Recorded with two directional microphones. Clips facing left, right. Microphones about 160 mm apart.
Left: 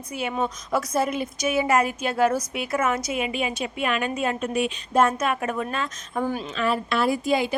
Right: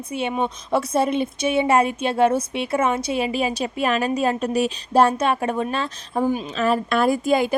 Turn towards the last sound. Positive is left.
turn(degrees=-50)  # may be behind; listen again after turning